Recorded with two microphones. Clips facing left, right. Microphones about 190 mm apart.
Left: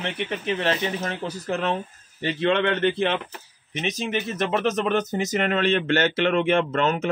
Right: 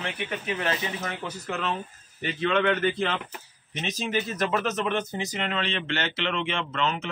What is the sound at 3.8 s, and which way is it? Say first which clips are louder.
Speech: left 2 dB; 25° left (ahead or behind).